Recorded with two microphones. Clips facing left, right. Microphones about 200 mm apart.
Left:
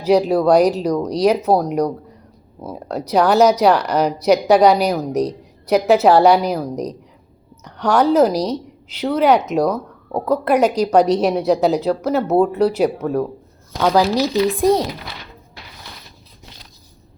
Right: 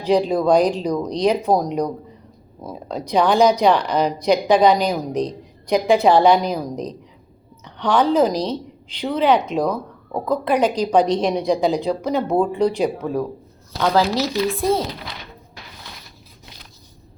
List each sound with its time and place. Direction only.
0.0 s a woman's voice: 5° left (ahead or behind)